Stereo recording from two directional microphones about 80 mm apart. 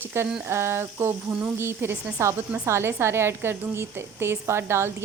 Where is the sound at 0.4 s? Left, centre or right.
Right.